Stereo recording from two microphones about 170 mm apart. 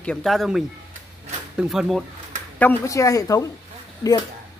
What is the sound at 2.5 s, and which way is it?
A woman's voice, 15° left (ahead or behind).